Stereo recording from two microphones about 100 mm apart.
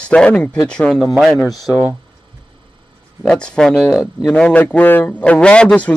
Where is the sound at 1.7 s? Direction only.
15° right (ahead or behind).